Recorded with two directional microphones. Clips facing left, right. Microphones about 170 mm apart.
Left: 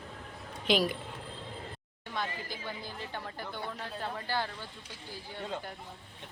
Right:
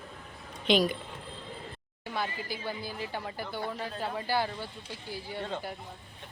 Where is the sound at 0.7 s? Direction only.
5° left (ahead or behind).